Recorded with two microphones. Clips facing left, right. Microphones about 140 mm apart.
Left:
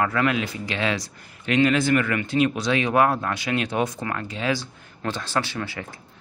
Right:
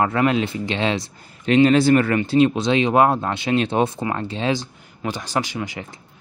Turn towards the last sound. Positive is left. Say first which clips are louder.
# right 2 dB
turn(degrees=-15)  # may be behind; listen again after turning